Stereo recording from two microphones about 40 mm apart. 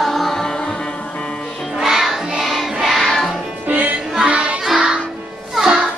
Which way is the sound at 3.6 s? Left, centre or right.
Right.